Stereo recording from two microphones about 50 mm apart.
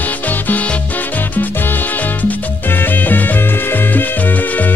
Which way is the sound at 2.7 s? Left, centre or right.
Left.